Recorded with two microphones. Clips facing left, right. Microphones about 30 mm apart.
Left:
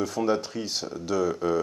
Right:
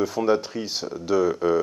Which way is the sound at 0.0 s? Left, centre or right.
Centre.